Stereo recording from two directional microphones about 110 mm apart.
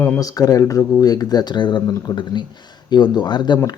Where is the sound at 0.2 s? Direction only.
35° left (ahead or behind).